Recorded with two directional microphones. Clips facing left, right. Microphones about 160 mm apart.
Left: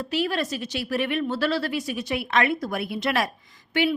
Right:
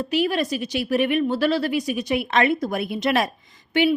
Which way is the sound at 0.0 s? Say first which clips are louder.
Right 4 dB; 15° right (ahead or behind).